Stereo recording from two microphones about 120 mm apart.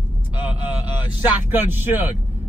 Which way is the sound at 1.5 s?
15° right (ahead or behind).